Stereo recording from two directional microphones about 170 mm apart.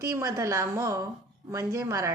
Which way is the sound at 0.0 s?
20° right (ahead or behind).